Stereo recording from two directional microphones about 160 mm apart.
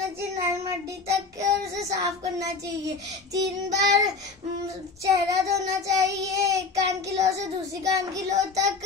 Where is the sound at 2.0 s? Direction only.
20° right (ahead or behind).